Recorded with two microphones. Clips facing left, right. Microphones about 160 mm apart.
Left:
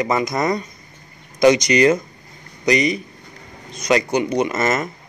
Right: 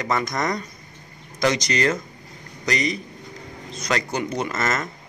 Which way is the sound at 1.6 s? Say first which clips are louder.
Left 8 dB; 15° left (ahead or behind).